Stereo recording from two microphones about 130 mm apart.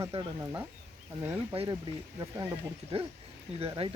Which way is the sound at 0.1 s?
55° right (ahead or behind).